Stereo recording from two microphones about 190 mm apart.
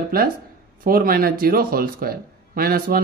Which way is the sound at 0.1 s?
50° right (ahead or behind).